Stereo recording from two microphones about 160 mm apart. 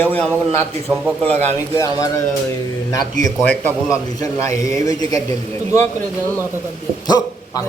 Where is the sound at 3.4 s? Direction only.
10° left (ahead or behind).